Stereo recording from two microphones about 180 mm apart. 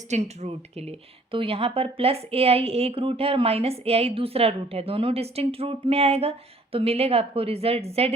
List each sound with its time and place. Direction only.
0.1 s speech: 35° right (ahead or behind)